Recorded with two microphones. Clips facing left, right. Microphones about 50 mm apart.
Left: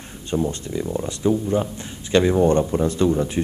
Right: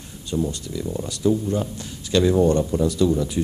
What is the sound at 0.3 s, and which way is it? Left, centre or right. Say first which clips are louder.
A man's voice: left 2 dB; left.